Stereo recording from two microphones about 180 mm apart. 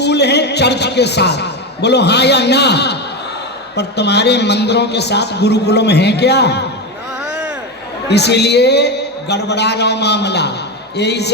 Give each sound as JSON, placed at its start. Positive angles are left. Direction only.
{"t": 0.0, "sound": "a man's voice", "side_deg": 70}
{"t": 7.3, "sound": "a sound", "side_deg": -5}
{"t": 8.0, "sound": "a man's voice", "side_deg": 70}